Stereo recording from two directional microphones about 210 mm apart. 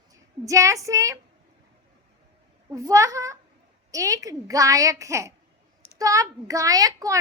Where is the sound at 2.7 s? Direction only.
15° right (ahead or behind).